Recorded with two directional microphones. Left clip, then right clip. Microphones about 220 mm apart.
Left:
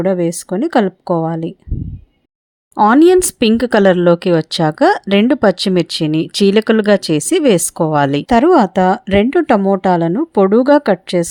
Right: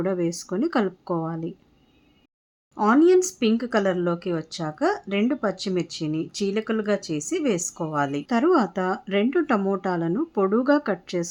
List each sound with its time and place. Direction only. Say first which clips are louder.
0.0 s speech: left 10 dB; 35° left (ahead or behind)
2.7 s speech: left 9 dB; 35° left (ahead or behind)